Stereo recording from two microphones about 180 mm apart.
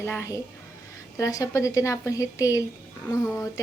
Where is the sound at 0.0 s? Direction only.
15° left (ahead or behind).